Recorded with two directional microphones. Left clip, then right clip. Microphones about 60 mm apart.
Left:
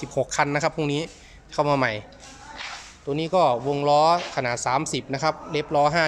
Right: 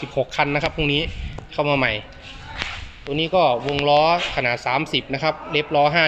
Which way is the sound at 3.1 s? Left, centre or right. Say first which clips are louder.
Right 3 dB; left.